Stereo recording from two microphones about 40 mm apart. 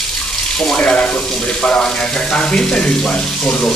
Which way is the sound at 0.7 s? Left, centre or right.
Left.